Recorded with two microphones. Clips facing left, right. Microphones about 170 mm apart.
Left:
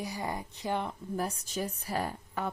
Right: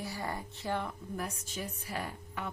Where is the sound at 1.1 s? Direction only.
35° left (ahead or behind).